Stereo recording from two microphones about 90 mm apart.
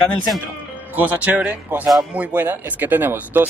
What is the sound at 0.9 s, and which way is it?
Speech, 20° right (ahead or behind).